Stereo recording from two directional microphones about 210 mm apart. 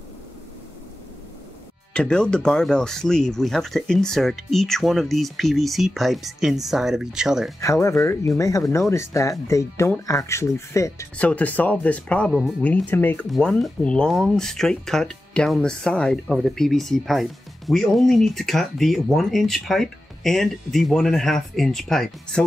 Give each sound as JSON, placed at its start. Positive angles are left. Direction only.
{"t": 2.0, "sound": "speech", "side_deg": 5}
{"t": 7.6, "sound": "speech", "side_deg": 15}